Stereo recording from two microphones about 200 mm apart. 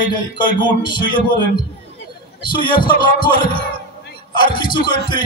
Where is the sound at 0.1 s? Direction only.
20° left (ahead or behind).